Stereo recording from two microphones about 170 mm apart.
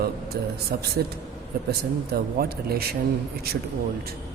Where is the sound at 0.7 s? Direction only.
60° right (ahead or behind).